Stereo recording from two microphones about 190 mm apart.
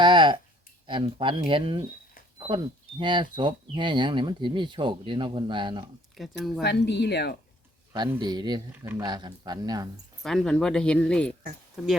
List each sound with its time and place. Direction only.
0.0 s a sound: 25° right (ahead or behind)
0.9 s speech: 25° right (ahead or behind)
3.0 s speech: 25° right (ahead or behind)
6.1 s speech: centre (ahead or behind)
6.6 s speech: 65° left (ahead or behind)
8.2 s speech: 25° right (ahead or behind)
10.2 s speech: centre (ahead or behind)